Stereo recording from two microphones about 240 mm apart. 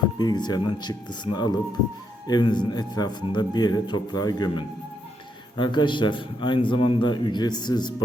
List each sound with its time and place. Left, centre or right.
0.2 s a man's voice: centre